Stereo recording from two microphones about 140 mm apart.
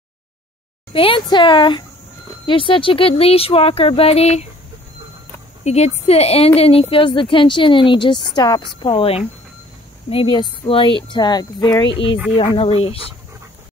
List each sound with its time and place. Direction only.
0.9 s speech: 40° left (ahead or behind)
5.6 s speech: 50° left (ahead or behind); by 11.9 s 30° left (ahead or behind)
12.4 s speech: 40° left (ahead or behind)